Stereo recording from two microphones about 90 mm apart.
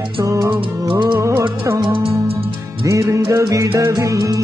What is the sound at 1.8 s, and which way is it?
Music, 80° right.